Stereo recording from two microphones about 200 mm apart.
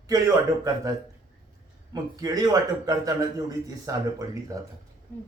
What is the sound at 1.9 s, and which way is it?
A man's voice, 20° right (ahead or behind).